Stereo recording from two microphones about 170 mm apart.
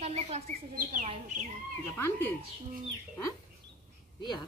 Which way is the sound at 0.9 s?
40° right (ahead or behind).